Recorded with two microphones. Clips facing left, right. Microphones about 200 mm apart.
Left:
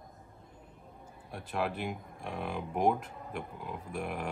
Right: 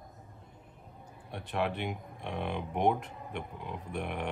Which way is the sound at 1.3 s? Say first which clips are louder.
Right 1 dB; centre (ahead or behind).